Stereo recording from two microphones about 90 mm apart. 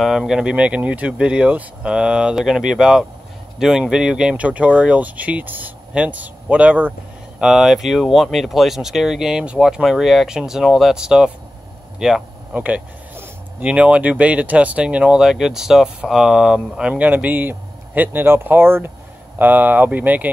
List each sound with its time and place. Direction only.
0.0 s speech: centre (ahead or behind); by 6.9 s 15° right (ahead or behind)
7.3 s speech: 5° right (ahead or behind)